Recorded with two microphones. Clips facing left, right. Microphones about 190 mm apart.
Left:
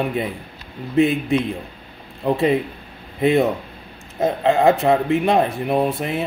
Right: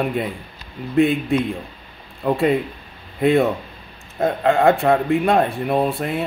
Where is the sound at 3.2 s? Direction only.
Centre (ahead or behind).